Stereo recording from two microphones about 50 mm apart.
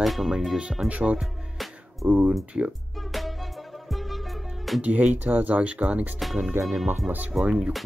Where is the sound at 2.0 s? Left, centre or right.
Right.